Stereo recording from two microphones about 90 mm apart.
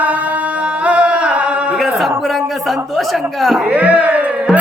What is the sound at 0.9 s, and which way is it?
Music, 10° right (ahead or behind).